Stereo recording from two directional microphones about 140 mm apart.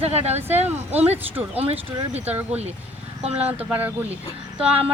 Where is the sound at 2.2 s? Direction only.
10° right (ahead or behind).